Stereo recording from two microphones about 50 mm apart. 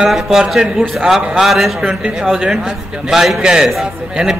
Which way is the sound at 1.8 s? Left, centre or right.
Centre.